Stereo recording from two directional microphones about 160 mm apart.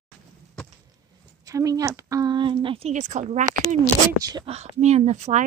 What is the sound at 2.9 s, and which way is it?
Speech, 50° right (ahead or behind).